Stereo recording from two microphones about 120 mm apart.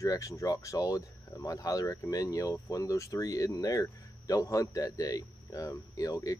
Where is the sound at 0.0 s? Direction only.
25° left (ahead or behind).